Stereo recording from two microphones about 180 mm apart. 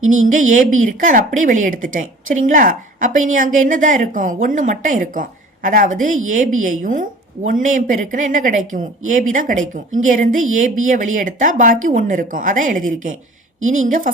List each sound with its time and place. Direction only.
0.1 s a woman's voice: 45° right (ahead or behind)